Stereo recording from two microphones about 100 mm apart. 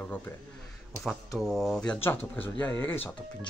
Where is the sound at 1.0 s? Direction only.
Centre (ahead or behind).